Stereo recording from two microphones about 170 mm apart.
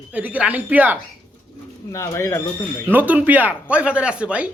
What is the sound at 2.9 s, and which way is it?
Speech, 10° right (ahead or behind).